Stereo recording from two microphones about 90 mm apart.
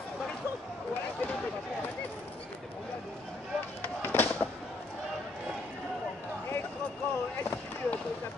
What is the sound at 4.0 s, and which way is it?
Fireworks, 20° left (ahead or behind).